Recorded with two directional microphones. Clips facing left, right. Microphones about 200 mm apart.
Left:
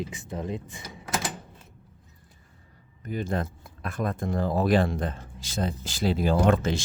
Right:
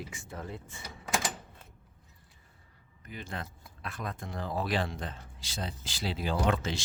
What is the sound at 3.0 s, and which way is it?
Speech, 45° left (ahead or behind).